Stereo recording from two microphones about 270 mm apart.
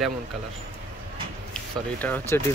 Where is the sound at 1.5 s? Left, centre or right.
Centre.